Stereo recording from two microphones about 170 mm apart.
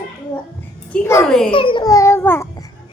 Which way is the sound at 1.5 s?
30° left (ahead or behind).